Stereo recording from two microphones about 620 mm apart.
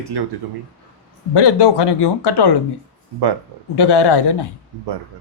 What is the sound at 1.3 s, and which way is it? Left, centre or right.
Speech, left.